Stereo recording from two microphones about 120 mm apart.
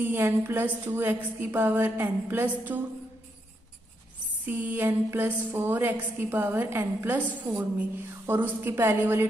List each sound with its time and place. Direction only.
0.0 s a woman's voice: 15° right (ahead or behind)
4.5 s a woman's voice: 15° right (ahead or behind)